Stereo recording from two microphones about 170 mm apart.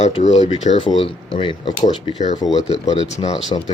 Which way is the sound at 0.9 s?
30° left (ahead or behind).